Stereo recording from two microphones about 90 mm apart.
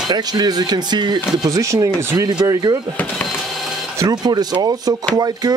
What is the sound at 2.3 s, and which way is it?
Speech, 50° right (ahead or behind).